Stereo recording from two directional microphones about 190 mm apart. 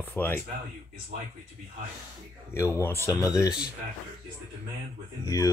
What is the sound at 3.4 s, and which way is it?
Speech, 5° right (ahead or behind).